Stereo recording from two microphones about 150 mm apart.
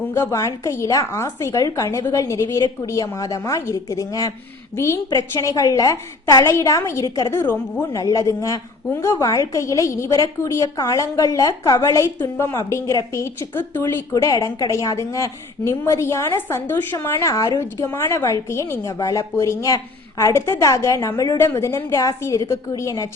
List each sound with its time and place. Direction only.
0.1 s a woman's voice: 20° left (ahead or behind)